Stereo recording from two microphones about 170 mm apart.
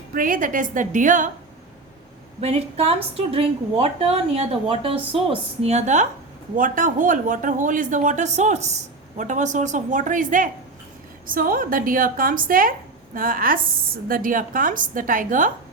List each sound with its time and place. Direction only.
0.1 s a woman's voice: 55° right (ahead or behind)
2.4 s a woman's voice: 40° right (ahead or behind)